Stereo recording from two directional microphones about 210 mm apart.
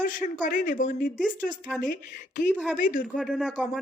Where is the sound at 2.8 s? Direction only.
40° left (ahead or behind).